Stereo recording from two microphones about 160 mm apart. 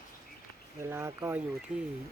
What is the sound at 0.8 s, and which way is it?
Speech, 15° right (ahead or behind).